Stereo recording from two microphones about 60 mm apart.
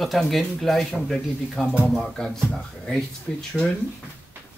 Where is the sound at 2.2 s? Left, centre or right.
Centre.